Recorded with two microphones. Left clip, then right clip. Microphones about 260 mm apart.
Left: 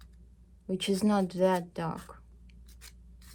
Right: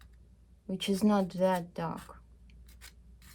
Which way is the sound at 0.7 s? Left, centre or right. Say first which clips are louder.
Left 1 dB; left.